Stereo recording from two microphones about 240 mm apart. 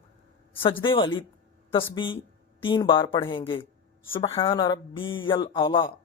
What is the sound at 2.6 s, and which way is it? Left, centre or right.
Speech, centre.